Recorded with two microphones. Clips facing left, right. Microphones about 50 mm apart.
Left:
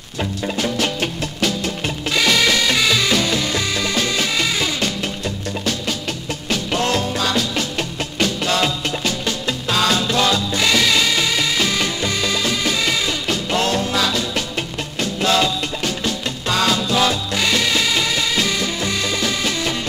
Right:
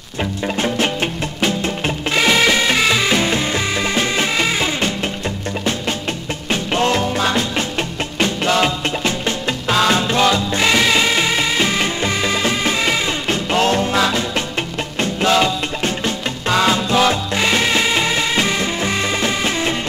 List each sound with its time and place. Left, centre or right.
0.6 s music: right
6.5 s music: right